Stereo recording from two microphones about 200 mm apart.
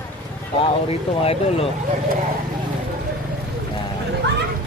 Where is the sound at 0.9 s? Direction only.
30° left (ahead or behind).